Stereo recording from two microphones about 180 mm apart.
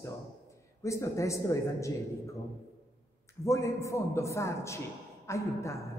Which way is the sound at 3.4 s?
15° left (ahead or behind).